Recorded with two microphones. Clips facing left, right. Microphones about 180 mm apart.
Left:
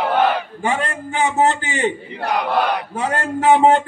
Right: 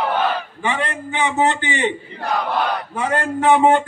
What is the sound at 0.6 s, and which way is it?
A man's voice, 45° left (ahead or behind).